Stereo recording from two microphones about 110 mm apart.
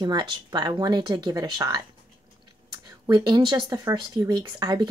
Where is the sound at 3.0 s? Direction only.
40° right (ahead or behind).